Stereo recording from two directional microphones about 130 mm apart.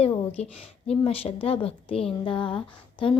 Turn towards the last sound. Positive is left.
turn(degrees=45)  # may be behind; listen again after turning